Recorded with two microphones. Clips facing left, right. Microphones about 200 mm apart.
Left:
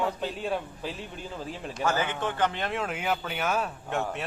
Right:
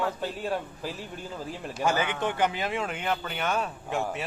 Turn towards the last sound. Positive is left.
turn(degrees=0)  # may be behind; listen again after turning